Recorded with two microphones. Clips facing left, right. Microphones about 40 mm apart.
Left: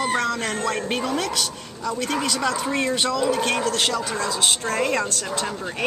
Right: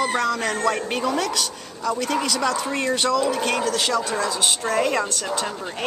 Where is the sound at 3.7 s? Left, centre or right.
Left.